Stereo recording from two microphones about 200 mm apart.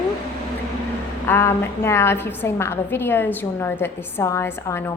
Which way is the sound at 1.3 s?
10° left (ahead or behind).